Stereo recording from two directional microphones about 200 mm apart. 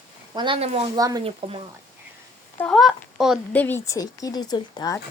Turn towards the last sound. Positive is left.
turn(degrees=20)  # may be behind; listen again after turning